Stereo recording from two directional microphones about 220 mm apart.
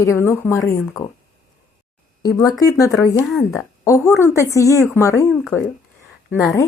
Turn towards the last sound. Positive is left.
turn(degrees=15)  # may be behind; listen again after turning